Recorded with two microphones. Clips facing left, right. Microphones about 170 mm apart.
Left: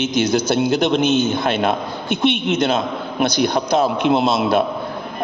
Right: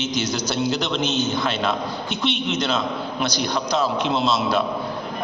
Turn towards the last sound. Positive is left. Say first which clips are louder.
# left 5 dB
turn(degrees=55)  # may be behind; listen again after turning